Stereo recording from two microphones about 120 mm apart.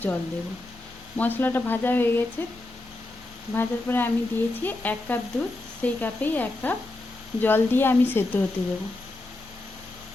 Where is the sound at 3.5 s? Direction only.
15° left (ahead or behind).